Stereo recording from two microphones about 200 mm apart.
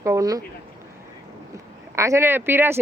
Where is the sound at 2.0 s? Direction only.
15° right (ahead or behind).